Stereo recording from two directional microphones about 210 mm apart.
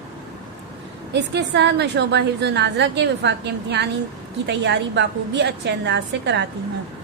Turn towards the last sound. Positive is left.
turn(degrees=-55)  # may be behind; listen again after turning